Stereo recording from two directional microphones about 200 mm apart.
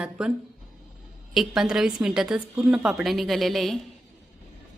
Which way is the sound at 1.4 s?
Centre (ahead or behind).